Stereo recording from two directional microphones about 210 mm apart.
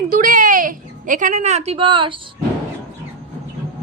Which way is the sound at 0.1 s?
40° right (ahead or behind).